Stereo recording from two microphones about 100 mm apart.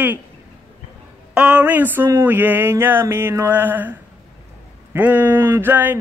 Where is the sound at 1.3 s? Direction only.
10° right (ahead or behind).